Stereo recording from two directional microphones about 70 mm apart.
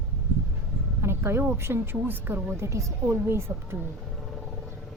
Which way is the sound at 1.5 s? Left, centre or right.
Right.